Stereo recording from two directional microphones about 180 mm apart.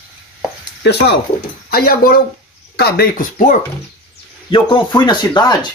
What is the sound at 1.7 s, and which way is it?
Speech, 55° left (ahead or behind).